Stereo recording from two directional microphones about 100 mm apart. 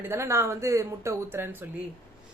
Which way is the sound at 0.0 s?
25° right (ahead or behind).